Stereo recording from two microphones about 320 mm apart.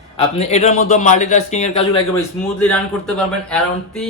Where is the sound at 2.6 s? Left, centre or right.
Centre.